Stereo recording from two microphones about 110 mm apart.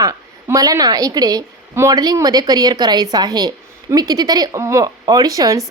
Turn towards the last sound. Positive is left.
turn(degrees=-35)  # may be behind; listen again after turning